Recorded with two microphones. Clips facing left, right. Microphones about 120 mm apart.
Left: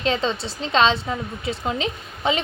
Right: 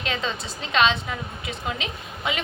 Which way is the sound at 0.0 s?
30° left (ahead or behind).